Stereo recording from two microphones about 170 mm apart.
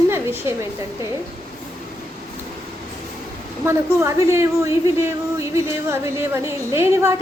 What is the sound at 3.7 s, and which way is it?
A woman's voice, 15° right (ahead or behind).